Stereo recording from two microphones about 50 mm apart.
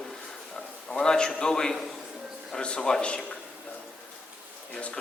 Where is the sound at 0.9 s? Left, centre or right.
Centre.